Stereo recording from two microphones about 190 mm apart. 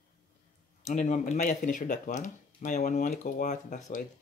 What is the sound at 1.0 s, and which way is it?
Speech, 40° left (ahead or behind).